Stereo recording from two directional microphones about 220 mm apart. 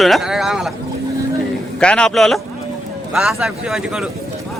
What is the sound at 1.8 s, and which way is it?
Speech, 5° left (ahead or behind).